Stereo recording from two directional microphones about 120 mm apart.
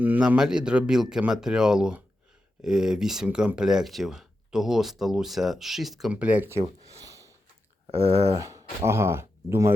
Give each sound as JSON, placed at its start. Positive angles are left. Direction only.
{"t": 0.0, "sound": "speech", "side_deg": -15}
{"t": 7.0, "sound": "a sound", "side_deg": -25}
{"t": 7.9, "sound": "speech", "side_deg": -55}
{"t": 8.4, "sound": "speech", "side_deg": -25}